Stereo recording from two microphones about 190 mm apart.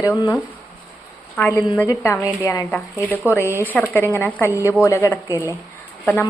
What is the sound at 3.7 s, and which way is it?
Speech, 10° left (ahead or behind).